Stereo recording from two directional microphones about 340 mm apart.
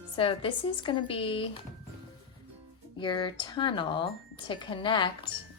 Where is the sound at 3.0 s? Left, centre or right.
Centre.